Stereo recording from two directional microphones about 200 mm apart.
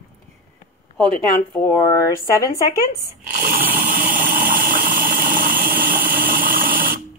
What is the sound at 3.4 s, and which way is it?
Chainsaw, 45° right (ahead or behind).